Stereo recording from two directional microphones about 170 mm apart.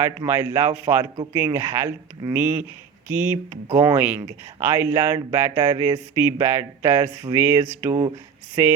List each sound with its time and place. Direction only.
0.0 s speech: 15° right (ahead or behind)